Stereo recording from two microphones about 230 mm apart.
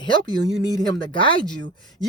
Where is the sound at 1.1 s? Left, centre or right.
Left.